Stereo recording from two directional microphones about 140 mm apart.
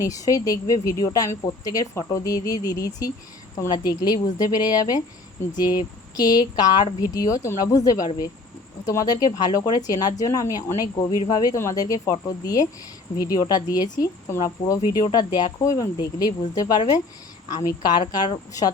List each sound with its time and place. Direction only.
0.0 s a woman's voice: 25° left (ahead or behind)